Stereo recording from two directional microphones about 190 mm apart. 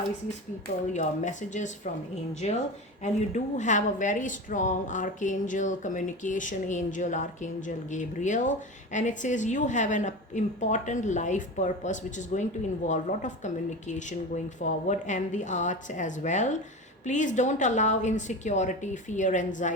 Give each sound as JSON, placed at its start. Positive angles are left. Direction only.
{"t": 0.9, "sound": "speech", "side_deg": 40}